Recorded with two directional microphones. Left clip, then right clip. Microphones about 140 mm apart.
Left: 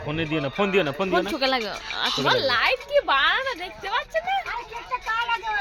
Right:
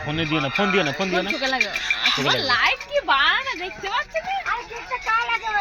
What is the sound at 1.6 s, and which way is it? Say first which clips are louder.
Speech: right 6 dB; 30° right (ahead or behind).